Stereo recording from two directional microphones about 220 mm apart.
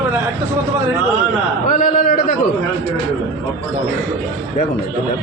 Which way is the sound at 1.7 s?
40° left (ahead or behind).